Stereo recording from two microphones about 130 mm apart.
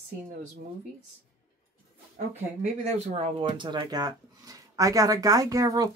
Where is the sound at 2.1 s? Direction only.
60° right (ahead or behind).